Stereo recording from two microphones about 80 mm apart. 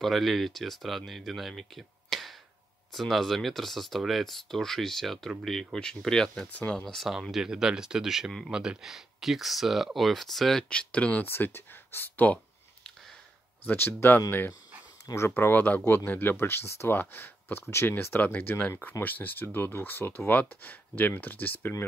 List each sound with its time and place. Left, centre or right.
0.0 s speech: centre
6.5 s speech: centre
6.8 s speech: centre
10.7 s speech: centre
13.7 s speech: left
15.8 s speech: left
16.1 s speech: left